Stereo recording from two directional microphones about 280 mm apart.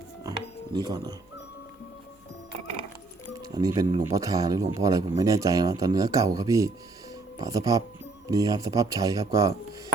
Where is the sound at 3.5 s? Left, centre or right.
Centre.